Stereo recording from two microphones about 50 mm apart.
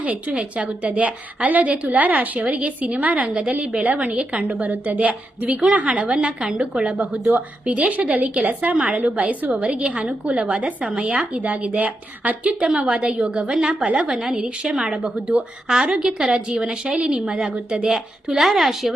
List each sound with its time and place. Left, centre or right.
0.0 s a woman's voice: right
7.6 s a woman's voice: right
9.6 s a woman's voice: right
13.8 s a woman's voice: right
14.1 s a woman's voice: centre
14.3 s a woman's voice: centre